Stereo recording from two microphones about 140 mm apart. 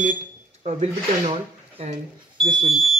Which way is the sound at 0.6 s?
50° right (ahead or behind).